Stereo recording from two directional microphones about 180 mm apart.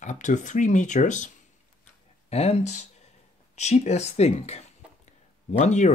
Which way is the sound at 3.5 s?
40° left (ahead or behind).